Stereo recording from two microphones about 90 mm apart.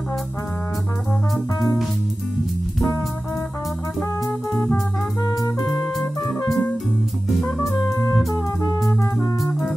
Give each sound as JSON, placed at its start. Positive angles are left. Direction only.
{"t": 5.9, "sound": "music", "side_deg": 0}
{"t": 7.8, "sound": "music", "side_deg": 35}